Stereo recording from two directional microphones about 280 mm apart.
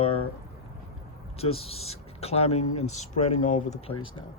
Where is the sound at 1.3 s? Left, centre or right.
Left.